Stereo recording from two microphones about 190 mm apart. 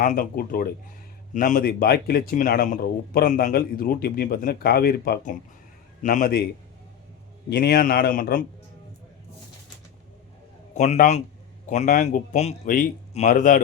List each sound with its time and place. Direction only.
0.0 s a man's voice: 45° left (ahead or behind)
7.5 s a man's voice: 55° left (ahead or behind)
10.8 s a man's voice: 40° left (ahead or behind)